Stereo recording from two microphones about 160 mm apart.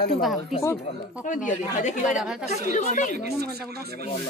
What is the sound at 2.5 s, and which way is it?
Speech, 45° left (ahead or behind).